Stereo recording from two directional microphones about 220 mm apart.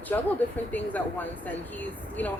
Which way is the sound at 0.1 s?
10° left (ahead or behind).